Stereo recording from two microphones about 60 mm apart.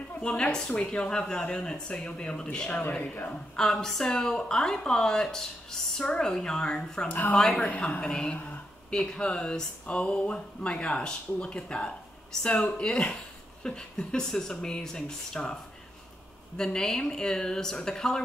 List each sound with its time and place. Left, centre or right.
0.2 s speech: centre
3.0 s a man's voice: left
3.5 s speech: centre
7.1 s a woman's voice: left
7.3 s speech: centre
16.5 s speech: centre